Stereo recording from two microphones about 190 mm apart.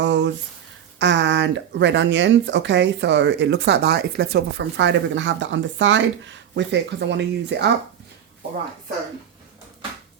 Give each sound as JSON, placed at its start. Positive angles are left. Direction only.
{"t": 0.0, "sound": "speech", "side_deg": -70}